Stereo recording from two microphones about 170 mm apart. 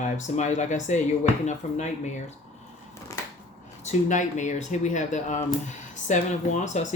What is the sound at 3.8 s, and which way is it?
Speech, 45° left (ahead or behind).